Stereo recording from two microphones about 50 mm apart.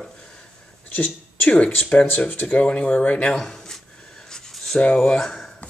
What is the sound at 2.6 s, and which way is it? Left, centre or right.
Speech, left.